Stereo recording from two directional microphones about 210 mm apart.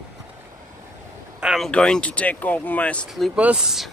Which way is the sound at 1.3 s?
Centre (ahead or behind).